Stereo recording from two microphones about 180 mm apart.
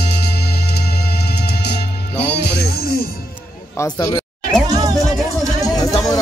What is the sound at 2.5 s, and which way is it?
Music, 60° left (ahead or behind).